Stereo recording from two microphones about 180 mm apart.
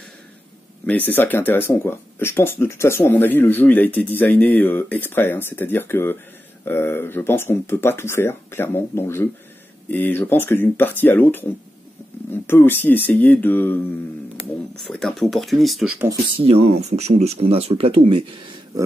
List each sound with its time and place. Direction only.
0.8 s speech: 10° left (ahead or behind)
12.4 s speech: 10° left (ahead or behind)
14.9 s speech: centre (ahead or behind)
16.3 s speech: 35° right (ahead or behind)